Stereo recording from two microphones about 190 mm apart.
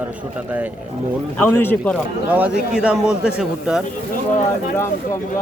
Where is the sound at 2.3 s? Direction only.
10° right (ahead or behind).